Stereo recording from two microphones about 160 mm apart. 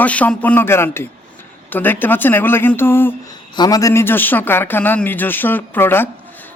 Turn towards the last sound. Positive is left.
turn(degrees=15)  # may be behind; listen again after turning